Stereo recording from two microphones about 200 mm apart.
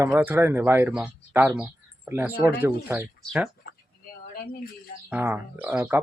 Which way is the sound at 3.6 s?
50° left (ahead or behind).